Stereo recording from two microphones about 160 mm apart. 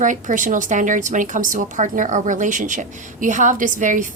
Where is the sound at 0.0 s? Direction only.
50° right (ahead or behind).